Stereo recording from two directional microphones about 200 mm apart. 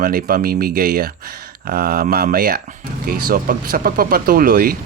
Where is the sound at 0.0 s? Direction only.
45° right (ahead or behind).